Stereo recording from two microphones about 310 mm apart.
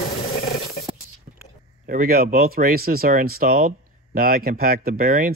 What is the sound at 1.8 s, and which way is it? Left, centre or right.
Speech, right.